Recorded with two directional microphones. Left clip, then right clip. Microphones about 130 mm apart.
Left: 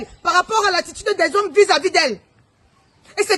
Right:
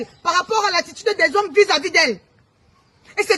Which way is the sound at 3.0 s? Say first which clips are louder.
Even; 25° left (ahead or behind).